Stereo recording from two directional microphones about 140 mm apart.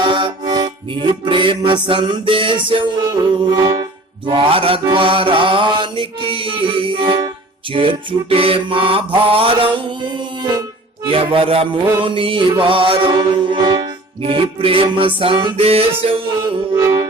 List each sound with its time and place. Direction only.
0.0 s music: 35° right (ahead or behind)
4.3 s mantra: 40° right (ahead or behind)
16.0 s music: 40° right (ahead or behind)
16.7 s music: 25° right (ahead or behind)